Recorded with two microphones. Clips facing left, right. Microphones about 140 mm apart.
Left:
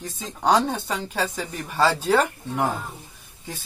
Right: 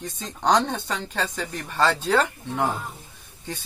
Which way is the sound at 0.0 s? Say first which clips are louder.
Left 1 dB; 5° left (ahead or behind).